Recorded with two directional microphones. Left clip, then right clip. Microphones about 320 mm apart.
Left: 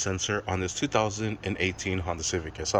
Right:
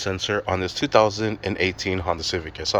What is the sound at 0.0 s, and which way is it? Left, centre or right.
Speech, centre.